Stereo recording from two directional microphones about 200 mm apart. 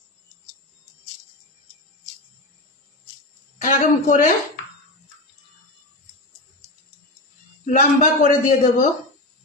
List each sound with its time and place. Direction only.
3.6 s a woman's voice: 40° left (ahead or behind)
7.6 s a man's voice: 40° left (ahead or behind)